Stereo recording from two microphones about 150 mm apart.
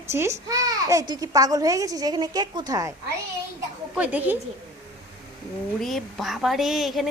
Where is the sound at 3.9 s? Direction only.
10° right (ahead or behind).